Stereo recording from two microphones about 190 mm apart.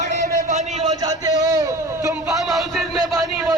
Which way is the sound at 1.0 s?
15° right (ahead or behind).